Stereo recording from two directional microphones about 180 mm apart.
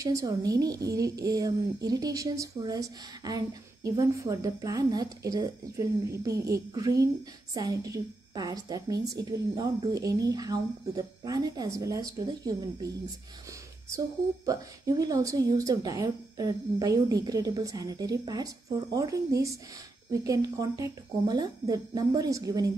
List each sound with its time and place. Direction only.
0.0 s a woman's voice: 20° right (ahead or behind)